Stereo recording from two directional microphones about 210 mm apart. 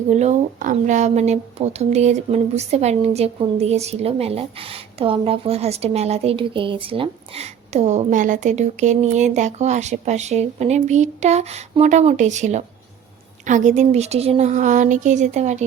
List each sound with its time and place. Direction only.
0.1 s speech: 35° right (ahead or behind)